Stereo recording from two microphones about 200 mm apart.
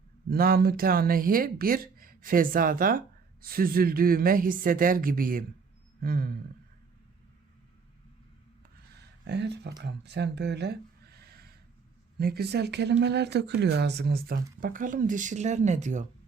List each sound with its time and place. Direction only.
0.3 s speech: 50° right (ahead or behind)
9.0 s a sound: 60° right (ahead or behind)
9.8 s speech: 60° right (ahead or behind); by 16.0 s 35° right (ahead or behind)